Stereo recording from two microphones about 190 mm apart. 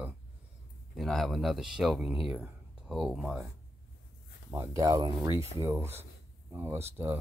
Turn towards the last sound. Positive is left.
turn(degrees=-15)  # may be behind; listen again after turning